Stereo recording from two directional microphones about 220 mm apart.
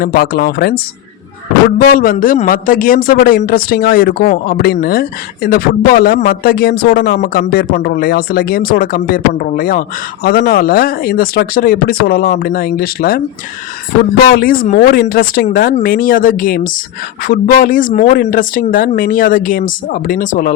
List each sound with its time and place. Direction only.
0.0 s a man's voice: 45° left (ahead or behind)
14.3 s speech: 40° left (ahead or behind)